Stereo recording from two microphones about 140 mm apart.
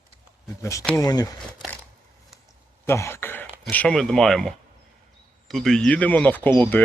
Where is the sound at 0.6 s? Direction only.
20° left (ahead or behind).